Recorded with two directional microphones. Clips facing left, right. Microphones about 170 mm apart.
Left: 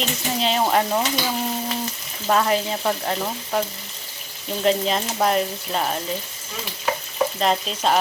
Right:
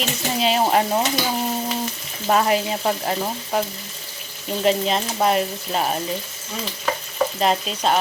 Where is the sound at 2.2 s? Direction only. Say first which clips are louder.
Right 1 dB; 10° right (ahead or behind).